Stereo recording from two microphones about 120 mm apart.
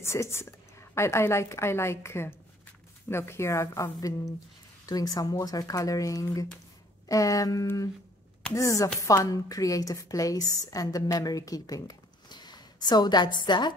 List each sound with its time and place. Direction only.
0.0 s a woman's voice: 20° left (ahead or behind); by 13.7 s 40° left (ahead or behind)